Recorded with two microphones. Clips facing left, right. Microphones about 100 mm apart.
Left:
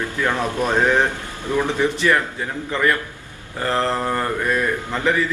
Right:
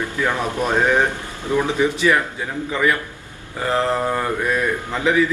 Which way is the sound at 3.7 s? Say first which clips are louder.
Right 1 dB; 5° right (ahead or behind).